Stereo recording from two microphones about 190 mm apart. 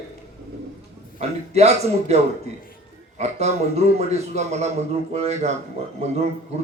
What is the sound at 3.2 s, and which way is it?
A man's voice, 35° right (ahead or behind).